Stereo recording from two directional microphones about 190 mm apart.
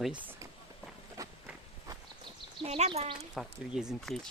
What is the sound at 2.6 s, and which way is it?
Speech, 35° right (ahead or behind).